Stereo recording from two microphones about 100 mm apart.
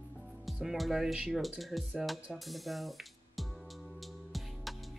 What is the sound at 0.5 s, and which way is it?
Speech, 5° right (ahead or behind).